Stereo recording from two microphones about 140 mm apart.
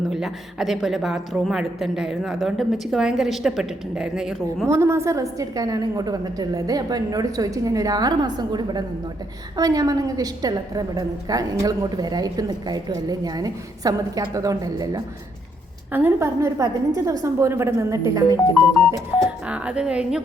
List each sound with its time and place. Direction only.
0.1 s a woman's voice: centre (ahead or behind)
4.6 s a woman's voice: 20° right (ahead or behind)
15.9 s a woman's voice: 15° right (ahead or behind)
19.5 s a woman's voice: 10° right (ahead or behind)